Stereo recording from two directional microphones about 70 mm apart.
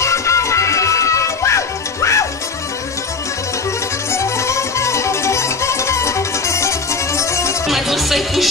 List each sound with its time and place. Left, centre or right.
0.0 s music: left
4.1 s music: left
7.6 s music: centre